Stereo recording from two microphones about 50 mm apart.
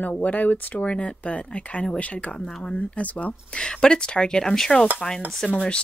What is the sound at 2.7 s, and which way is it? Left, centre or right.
Speech, left.